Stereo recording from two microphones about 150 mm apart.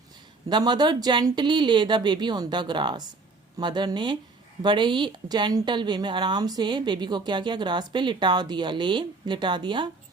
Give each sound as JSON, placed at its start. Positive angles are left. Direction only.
{"t": 0.4, "sound": "speech", "side_deg": -30}